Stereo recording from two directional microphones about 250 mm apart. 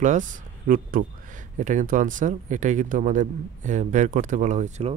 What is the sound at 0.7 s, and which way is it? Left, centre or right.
Speech, right.